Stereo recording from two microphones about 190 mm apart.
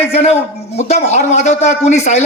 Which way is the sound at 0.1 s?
35° left (ahead or behind).